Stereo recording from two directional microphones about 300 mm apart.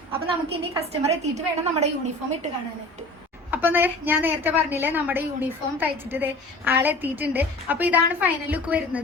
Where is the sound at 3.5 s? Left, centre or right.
Centre.